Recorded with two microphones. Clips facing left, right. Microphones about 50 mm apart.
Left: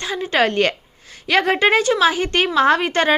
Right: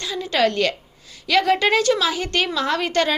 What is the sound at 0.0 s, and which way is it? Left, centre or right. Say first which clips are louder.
A woman's voice: left 2 dB; left.